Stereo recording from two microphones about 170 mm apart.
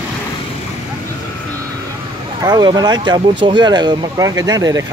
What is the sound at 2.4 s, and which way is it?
Speech, 25° right (ahead or behind).